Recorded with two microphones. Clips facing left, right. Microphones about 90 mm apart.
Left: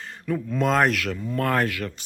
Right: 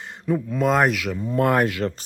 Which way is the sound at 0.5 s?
5° right (ahead or behind).